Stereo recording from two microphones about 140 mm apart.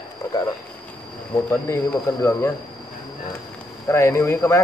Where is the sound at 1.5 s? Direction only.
15° left (ahead or behind).